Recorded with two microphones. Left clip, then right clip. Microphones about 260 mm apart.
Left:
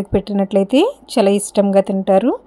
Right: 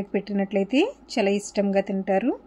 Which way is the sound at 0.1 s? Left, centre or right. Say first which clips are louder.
Left 9 dB; left.